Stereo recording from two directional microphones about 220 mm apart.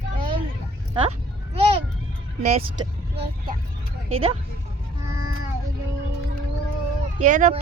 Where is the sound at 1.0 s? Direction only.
25° right (ahead or behind).